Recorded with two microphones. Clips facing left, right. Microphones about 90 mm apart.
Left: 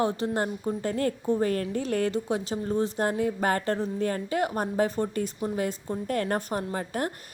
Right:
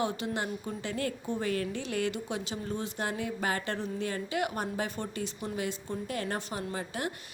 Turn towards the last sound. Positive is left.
turn(degrees=45)  # may be behind; listen again after turning